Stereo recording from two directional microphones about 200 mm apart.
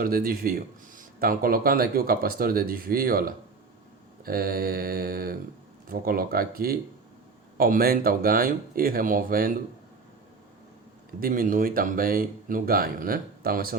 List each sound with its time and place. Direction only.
0.0 s speech: 45° right (ahead or behind)
11.2 s speech: 45° right (ahead or behind)